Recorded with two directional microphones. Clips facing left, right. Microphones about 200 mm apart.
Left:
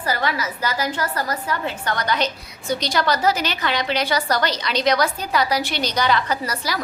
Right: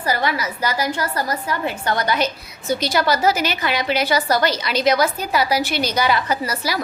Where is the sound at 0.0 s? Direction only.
15° right (ahead or behind).